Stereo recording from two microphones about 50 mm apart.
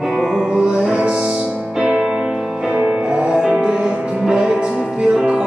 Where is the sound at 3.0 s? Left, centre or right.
Right.